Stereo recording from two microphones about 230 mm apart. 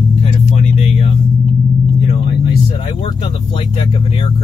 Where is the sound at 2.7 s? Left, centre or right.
Left.